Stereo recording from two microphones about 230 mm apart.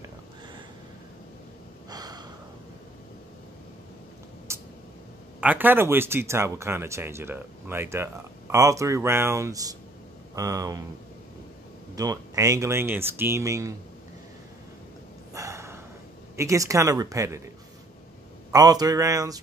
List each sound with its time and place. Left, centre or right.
1.9 s gasp: centre
4.5 s a sound: centre
5.4 s speech: centre
11.9 s speech: centre
15.3 s a sound: centre
16.3 s speech: centre
18.5 s speech: centre